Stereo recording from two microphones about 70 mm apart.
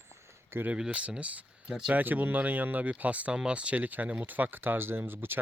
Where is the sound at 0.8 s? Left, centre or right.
Centre.